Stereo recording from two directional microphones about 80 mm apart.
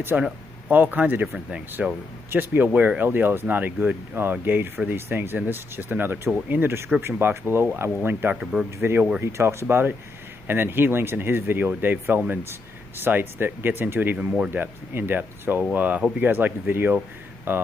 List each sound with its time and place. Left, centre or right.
0.1 s speech: centre
2.3 s speech: right